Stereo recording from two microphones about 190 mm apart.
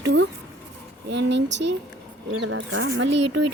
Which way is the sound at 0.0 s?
70° right (ahead or behind).